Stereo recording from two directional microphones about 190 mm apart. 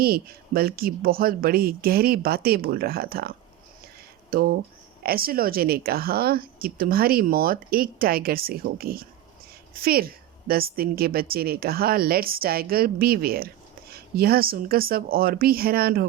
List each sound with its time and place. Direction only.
0.0 s a woman's voice: 50° right (ahead or behind)